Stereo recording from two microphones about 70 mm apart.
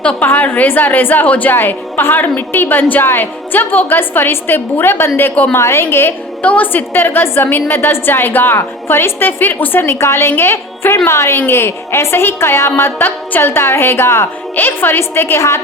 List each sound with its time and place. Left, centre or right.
0.0 s a woman's voice: centre; by 5.3 s left
5.3 s a woman's voice: left
5.5 s a woman's voice: left
6.4 s a woman's voice: left